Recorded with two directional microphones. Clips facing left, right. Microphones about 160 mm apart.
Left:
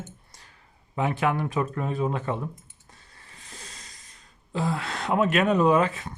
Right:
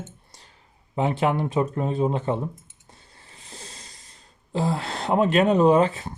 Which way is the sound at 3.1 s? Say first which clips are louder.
Right 2 dB; 30° right (ahead or behind).